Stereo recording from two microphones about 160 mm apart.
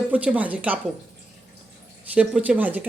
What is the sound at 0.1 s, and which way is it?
Speech, 10° right (ahead or behind).